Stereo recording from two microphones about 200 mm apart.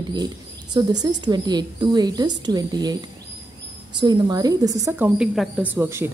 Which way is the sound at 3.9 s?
20° right (ahead or behind).